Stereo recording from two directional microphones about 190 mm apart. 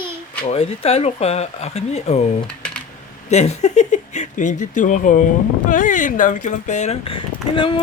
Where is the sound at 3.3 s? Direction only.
35° left (ahead or behind).